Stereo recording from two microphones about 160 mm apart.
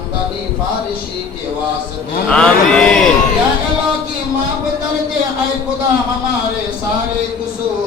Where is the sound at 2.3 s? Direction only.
5° left (ahead or behind).